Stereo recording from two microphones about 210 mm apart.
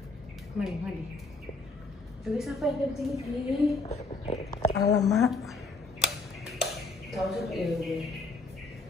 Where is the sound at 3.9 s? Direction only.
30° left (ahead or behind).